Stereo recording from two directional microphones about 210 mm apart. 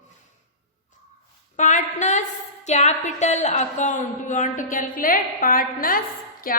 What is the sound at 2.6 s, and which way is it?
A woman's voice, 35° left (ahead or behind).